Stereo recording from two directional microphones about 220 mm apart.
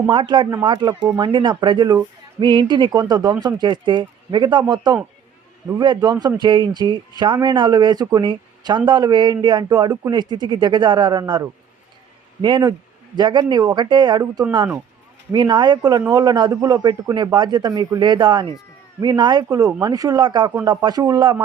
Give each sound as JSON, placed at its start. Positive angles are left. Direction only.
{"t": 0.1, "sound": "a man's voice", "side_deg": -20}